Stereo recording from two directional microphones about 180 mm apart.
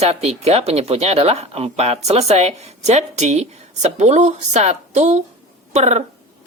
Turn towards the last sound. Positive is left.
turn(degrees=-40)  # may be behind; listen again after turning